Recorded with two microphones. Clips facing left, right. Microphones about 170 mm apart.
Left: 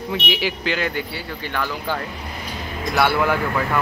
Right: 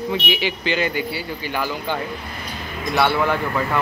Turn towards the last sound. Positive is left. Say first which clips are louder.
# even
turn(degrees=0)  # may be behind; listen again after turning